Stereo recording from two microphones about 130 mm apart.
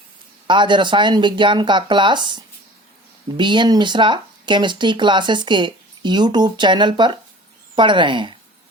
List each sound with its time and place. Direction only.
0.4 s speech: 35° right (ahead or behind)